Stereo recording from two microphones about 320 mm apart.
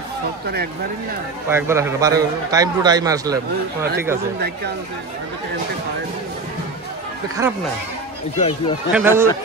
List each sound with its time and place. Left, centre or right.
1.5 s a man's voice: centre
8.4 s speech: centre
8.9 s a man's voice: centre